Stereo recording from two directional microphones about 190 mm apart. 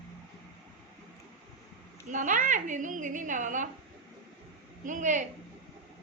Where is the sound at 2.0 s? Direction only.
40° right (ahead or behind).